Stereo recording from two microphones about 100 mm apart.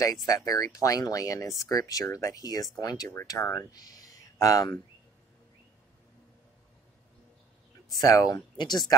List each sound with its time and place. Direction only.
0.3 s speech: 35° left (ahead or behind)
3.7 s a sound: 40° left (ahead or behind)
8.0 s speech: 40° left (ahead or behind)